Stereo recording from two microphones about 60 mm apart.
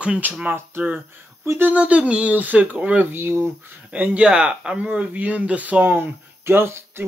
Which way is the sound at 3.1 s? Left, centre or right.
Right.